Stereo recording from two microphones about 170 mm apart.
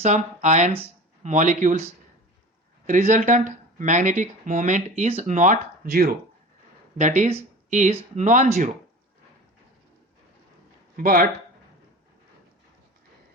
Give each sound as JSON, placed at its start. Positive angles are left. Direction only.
{"t": 0.0, "sound": "speech", "side_deg": -45}
{"t": 2.8, "sound": "speech", "side_deg": -45}
{"t": 6.9, "sound": "speech", "side_deg": -45}
{"t": 10.9, "sound": "speech", "side_deg": -55}